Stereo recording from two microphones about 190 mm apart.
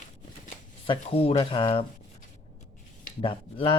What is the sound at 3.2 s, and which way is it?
Speech, 25° left (ahead or behind).